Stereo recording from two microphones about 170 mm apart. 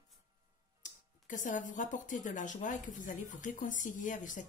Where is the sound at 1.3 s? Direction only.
50° left (ahead or behind).